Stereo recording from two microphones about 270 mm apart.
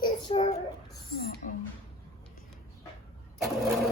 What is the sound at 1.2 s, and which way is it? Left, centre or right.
Speech, left.